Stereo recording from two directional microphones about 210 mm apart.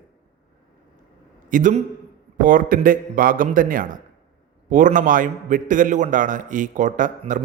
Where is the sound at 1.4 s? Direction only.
40° right (ahead or behind).